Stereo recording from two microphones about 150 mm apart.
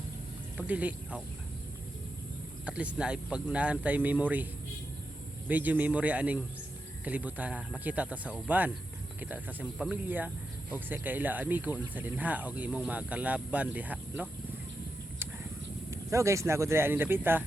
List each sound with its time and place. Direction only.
0.5 s speech: 10° right (ahead or behind)
2.6 s speech: 10° right (ahead or behind)
5.5 s a man's voice: 10° right (ahead or behind)
15.9 s speech: 20° right (ahead or behind)